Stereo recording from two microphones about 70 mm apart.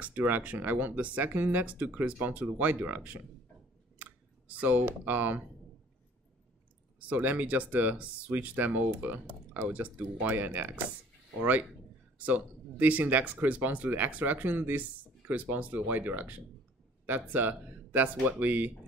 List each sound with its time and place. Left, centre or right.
0.0 s speech: right
4.0 s a sound: right
7.0 s speech: right
12.2 s speech: right